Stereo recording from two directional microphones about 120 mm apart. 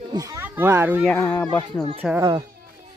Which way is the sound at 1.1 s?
20° left (ahead or behind).